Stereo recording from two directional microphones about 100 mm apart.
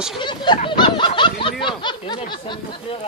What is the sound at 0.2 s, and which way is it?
Snicker, 50° left (ahead or behind).